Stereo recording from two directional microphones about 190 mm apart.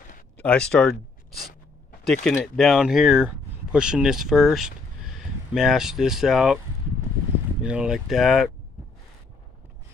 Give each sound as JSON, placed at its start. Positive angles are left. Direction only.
{"t": 0.4, "sound": "speech", "side_deg": 5}
{"t": 1.3, "sound": "a sound", "side_deg": 50}
{"t": 2.2, "sound": "speech", "side_deg": 0}
{"t": 7.6, "sound": "speech", "side_deg": -5}